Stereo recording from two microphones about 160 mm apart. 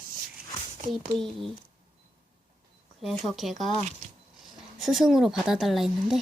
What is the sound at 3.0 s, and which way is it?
Speech, centre (ahead or behind).